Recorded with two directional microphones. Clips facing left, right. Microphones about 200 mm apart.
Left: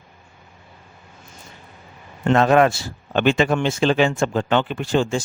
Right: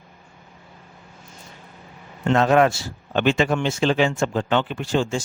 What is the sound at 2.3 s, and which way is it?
Speech, 60° left (ahead or behind).